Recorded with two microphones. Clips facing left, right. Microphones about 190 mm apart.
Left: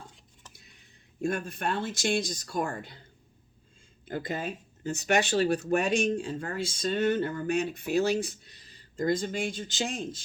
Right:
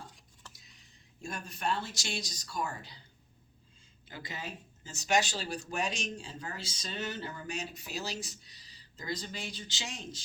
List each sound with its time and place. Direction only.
1.2 s speech: 55° left (ahead or behind)
4.0 s speech: 50° left (ahead or behind)